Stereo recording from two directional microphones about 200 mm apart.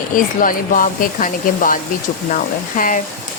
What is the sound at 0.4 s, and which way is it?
Speech, 45° left (ahead or behind).